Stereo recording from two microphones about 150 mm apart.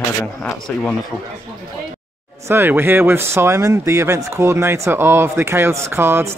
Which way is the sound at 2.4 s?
15° right (ahead or behind).